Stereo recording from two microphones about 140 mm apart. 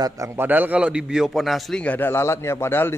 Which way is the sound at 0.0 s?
20° right (ahead or behind).